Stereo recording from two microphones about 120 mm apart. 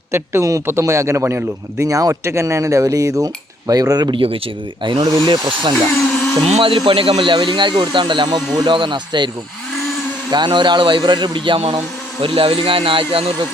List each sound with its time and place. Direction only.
0.1 s speech: 25° right (ahead or behind)
10.3 s speech: 40° right (ahead or behind)